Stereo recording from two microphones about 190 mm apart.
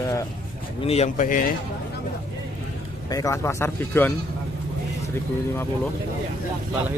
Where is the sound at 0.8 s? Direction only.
35° left (ahead or behind).